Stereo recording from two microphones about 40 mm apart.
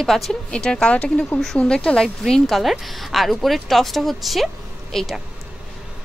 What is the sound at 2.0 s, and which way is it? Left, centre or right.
Speech, centre.